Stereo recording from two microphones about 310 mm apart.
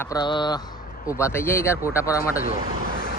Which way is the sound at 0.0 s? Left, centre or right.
Centre.